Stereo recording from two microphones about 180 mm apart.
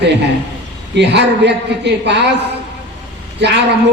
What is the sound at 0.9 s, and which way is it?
A man's voice, 70° right (ahead or behind).